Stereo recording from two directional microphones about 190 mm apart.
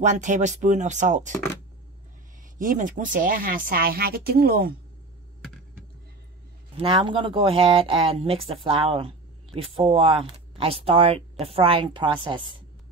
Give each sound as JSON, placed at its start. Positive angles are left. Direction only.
{"t": 0.0, "sound": "speech", "side_deg": -40}
{"t": 2.6, "sound": "speech", "side_deg": -45}
{"t": 6.8, "sound": "speech", "side_deg": -25}